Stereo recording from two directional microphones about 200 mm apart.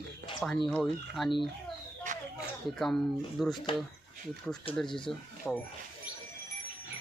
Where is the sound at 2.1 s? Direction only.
40° right (ahead or behind).